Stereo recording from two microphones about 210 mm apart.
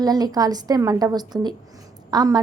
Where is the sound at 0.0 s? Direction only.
20° right (ahead or behind).